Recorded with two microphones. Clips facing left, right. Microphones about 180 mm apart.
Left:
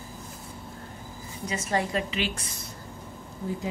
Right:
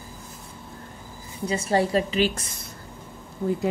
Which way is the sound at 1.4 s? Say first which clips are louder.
Right 6 dB; 30° right (ahead or behind).